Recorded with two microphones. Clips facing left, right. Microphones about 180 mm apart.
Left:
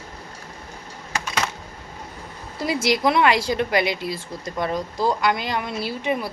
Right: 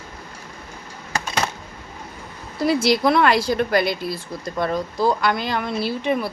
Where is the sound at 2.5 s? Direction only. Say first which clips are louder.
Right 4 dB; 15° left (ahead or behind).